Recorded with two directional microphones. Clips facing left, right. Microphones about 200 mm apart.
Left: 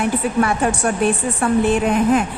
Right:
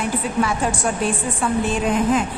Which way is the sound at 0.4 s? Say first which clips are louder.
Left 3 dB; 60° left (ahead or behind).